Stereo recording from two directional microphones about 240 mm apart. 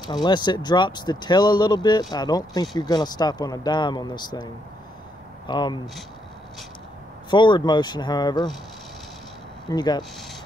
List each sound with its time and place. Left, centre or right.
0.0 s speech: centre
5.5 s speech: centre
7.2 s speech: centre
9.7 s speech: centre